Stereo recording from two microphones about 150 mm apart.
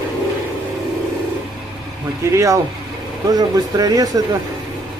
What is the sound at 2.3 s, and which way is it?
Speech, 20° right (ahead or behind).